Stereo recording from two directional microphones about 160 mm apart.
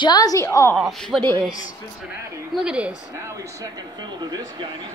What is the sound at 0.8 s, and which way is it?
Speech, centre (ahead or behind).